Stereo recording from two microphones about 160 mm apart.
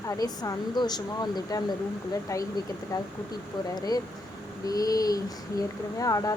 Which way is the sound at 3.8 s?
25° left (ahead or behind).